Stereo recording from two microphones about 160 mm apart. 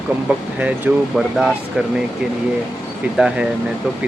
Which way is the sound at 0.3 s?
10° right (ahead or behind).